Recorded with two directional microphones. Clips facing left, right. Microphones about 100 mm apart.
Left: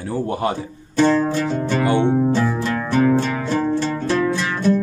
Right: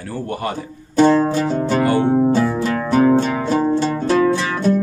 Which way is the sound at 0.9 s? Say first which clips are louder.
Right 3 dB; 15° right (ahead or behind).